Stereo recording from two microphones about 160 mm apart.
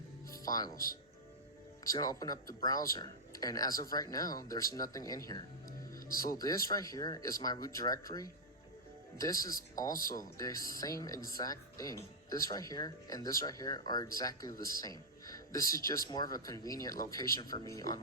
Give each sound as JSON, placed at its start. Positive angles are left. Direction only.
{"t": 0.4, "sound": "speech", "side_deg": 25}
{"t": 1.9, "sound": "speech", "side_deg": 20}
{"t": 10.0, "sound": "speech", "side_deg": 60}
{"t": 10.3, "sound": "speech", "side_deg": 20}